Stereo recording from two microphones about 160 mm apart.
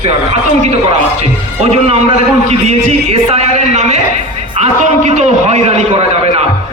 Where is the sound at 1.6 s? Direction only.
40° right (ahead or behind).